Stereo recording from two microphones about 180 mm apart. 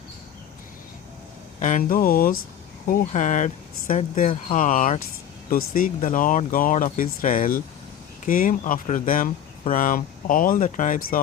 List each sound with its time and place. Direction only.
1.5 s speech: 45° left (ahead or behind)